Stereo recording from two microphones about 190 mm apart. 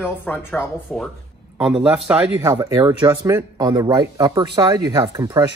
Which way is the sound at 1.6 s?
5° right (ahead or behind).